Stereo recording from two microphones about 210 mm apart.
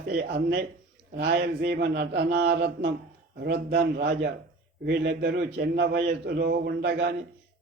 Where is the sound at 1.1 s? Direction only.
50° right (ahead or behind).